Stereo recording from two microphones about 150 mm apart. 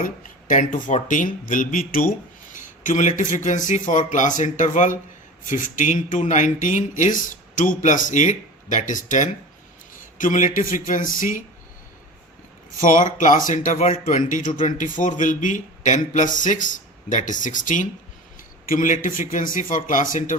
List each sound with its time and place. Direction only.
0.0 s speech: 60° left (ahead or behind)
12.8 s speech: 60° left (ahead or behind)